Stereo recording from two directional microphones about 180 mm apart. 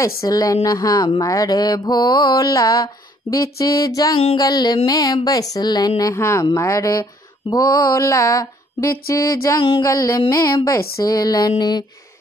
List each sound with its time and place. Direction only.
0.0 s speech: 20° left (ahead or behind)